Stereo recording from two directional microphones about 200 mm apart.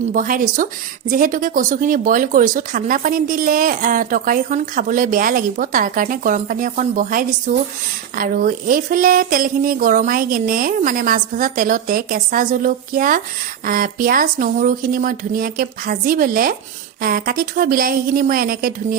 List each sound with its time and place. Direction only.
0.1 s a woman's voice: 40° right (ahead or behind)